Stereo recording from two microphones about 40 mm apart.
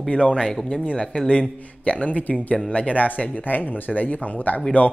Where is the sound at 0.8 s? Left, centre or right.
Left.